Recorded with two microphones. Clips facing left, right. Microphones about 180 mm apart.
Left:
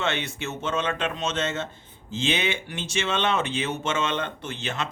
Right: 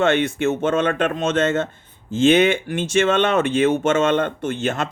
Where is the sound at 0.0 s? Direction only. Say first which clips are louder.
Right 11 dB; 50° right (ahead or behind).